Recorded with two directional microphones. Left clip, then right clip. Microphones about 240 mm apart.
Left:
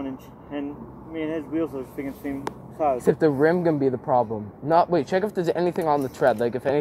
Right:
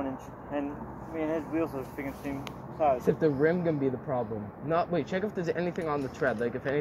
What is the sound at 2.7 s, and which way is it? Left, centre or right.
Speech, left.